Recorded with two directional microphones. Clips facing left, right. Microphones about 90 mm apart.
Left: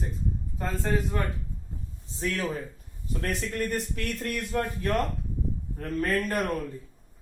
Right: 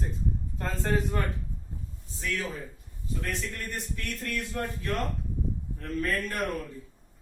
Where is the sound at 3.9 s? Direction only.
60° left (ahead or behind).